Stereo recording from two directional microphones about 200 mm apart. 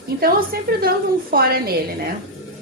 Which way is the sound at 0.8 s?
50° right (ahead or behind).